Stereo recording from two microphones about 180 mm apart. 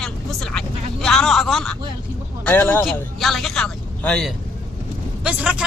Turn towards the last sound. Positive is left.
turn(degrees=-5)  # may be behind; listen again after turning